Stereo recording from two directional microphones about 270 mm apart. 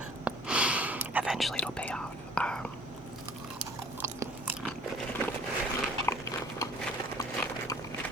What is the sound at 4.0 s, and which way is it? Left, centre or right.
Biting, centre.